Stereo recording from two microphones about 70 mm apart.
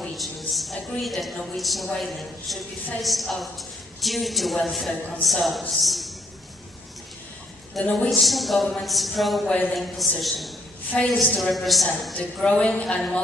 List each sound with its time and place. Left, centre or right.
0.0 s a woman's voice: centre
7.8 s a woman's voice: centre
10.9 s a woman's voice: centre
11.3 s a woman's voice: centre
12.2 s a woman's voice: centre